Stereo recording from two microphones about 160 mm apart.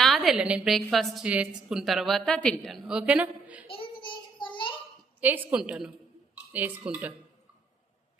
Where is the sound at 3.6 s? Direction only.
35° left (ahead or behind).